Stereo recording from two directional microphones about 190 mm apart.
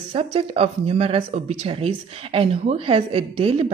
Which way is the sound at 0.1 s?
30° right (ahead or behind).